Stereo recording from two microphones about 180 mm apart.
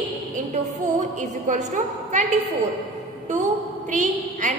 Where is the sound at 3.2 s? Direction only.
40° right (ahead or behind).